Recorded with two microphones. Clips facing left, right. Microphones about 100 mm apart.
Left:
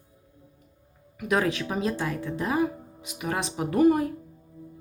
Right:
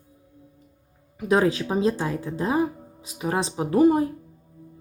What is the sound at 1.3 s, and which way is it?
Speech, 30° right (ahead or behind).